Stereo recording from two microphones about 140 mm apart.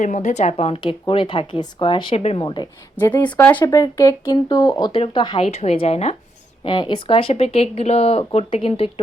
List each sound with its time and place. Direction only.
0.0 s speech: 60° left (ahead or behind)
2.4 s speech: 30° left (ahead or behind)
3.2 s speech: 10° left (ahead or behind)
3.6 s speech: 25° left (ahead or behind)
4.9 s speech: 40° left (ahead or behind)
5.5 s speech: 50° left (ahead or behind)
6.7 s speech: 35° left (ahead or behind)